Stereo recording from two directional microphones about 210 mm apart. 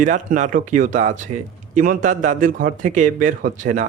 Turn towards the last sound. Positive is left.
turn(degrees=-40)  # may be behind; listen again after turning